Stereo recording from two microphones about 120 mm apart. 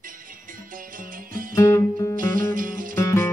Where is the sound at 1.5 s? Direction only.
25° left (ahead or behind).